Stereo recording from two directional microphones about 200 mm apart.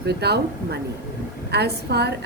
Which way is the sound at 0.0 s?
55° right (ahead or behind).